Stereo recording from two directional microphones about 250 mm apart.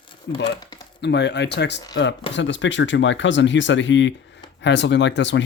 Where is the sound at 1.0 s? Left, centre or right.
Left.